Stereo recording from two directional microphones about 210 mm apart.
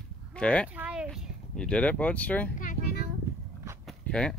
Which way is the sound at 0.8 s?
5° right (ahead or behind).